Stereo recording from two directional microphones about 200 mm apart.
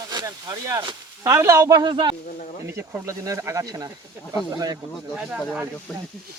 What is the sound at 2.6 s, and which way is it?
Speech, 10° right (ahead or behind).